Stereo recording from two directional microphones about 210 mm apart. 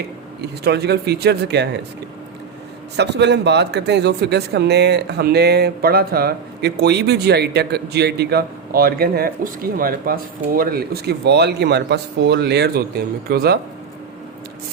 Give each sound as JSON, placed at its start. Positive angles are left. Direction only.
{"t": 0.6, "sound": "speech", "side_deg": -50}
{"t": 2.9, "sound": "speech", "side_deg": -55}